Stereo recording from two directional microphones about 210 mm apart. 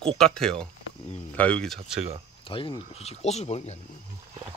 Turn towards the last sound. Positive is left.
turn(degrees=30)  # may be behind; listen again after turning